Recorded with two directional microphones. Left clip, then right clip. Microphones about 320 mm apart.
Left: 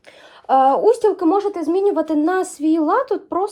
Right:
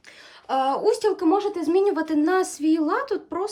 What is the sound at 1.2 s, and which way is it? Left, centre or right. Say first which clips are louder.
A woman's voice: left 4 dB; centre.